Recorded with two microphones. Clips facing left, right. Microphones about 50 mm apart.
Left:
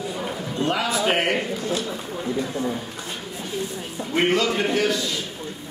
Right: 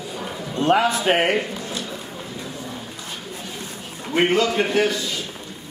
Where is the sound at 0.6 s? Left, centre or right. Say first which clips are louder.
Right 6 dB; right.